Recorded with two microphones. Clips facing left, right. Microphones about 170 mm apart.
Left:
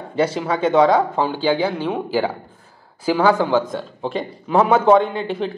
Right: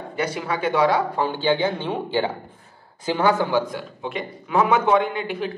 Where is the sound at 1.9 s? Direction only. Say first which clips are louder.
Left 3 dB; 10° left (ahead or behind).